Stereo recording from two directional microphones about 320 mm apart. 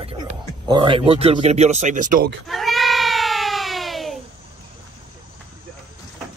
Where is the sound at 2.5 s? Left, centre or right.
Centre.